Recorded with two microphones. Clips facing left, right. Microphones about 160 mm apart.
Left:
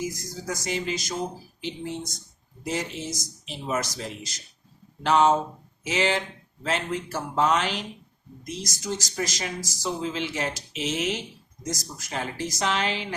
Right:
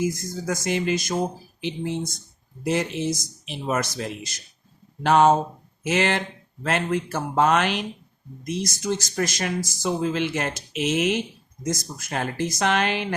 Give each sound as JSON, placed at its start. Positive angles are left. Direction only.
{"t": 0.2, "sound": "speech", "side_deg": -55}